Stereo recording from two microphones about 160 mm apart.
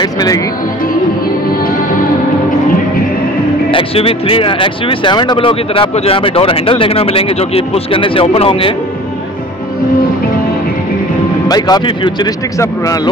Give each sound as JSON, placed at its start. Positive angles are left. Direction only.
{"t": 0.0, "sound": "speech", "side_deg": 25}
{"t": 3.7, "sound": "speech", "side_deg": 35}
{"t": 11.4, "sound": "speech", "side_deg": 25}